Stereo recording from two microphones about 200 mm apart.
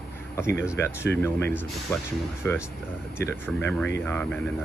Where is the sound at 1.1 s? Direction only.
10° left (ahead or behind).